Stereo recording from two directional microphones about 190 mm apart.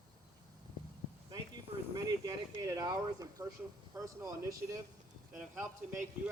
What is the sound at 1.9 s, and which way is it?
Speech, 20° right (ahead or behind).